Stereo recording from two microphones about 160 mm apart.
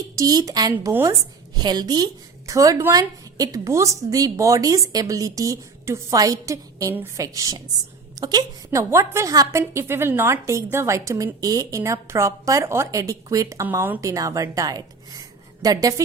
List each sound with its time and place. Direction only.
0.2 s a woman's voice: 20° right (ahead or behind)